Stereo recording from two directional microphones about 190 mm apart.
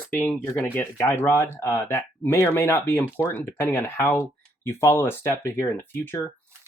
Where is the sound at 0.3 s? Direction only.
10° left (ahead or behind).